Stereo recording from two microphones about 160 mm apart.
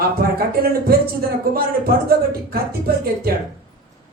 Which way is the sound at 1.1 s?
70° right (ahead or behind).